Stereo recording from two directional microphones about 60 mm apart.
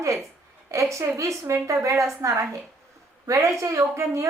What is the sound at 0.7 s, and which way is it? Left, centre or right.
A woman's voice, right.